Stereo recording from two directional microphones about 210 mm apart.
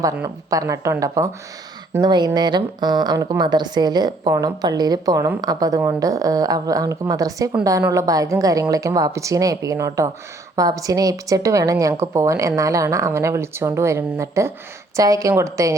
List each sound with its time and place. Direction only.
0.0 s speech: 15° right (ahead or behind)